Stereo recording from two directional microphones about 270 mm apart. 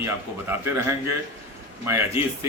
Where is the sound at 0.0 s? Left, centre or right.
Centre.